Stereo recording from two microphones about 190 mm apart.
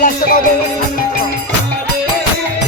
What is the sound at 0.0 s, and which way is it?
Music, 50° left (ahead or behind).